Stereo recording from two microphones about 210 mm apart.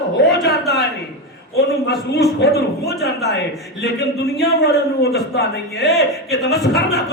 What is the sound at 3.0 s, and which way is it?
Speech, 55° left (ahead or behind).